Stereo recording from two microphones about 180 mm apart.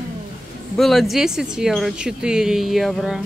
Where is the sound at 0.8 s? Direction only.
Centre (ahead or behind).